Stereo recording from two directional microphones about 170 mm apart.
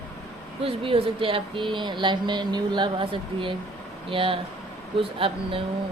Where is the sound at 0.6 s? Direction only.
30° right (ahead or behind).